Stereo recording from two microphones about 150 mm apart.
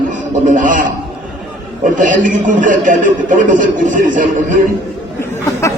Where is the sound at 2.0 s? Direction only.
60° right (ahead or behind).